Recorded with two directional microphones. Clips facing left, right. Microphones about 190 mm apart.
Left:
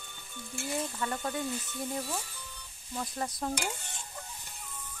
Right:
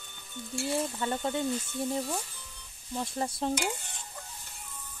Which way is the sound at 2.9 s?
25° right (ahead or behind).